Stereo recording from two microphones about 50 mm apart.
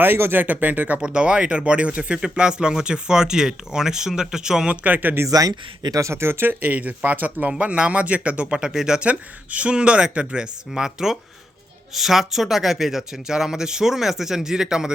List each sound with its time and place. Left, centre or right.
0.0 s speech: right
0.9 s speech: centre
4.7 s speech: right
6.0 s speech: right
7.6 s speech: right
9.0 s speech: right